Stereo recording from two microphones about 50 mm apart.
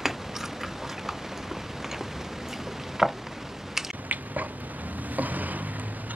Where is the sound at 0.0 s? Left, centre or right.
Centre.